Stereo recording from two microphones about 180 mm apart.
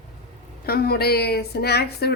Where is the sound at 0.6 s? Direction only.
60° left (ahead or behind).